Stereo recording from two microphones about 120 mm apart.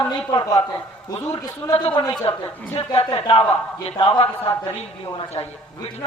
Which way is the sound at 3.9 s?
40° left (ahead or behind).